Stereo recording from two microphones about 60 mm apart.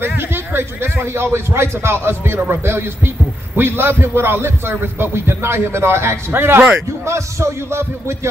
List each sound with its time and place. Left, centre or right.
0.3 s a man's voice: right
7.1 s a man's voice: right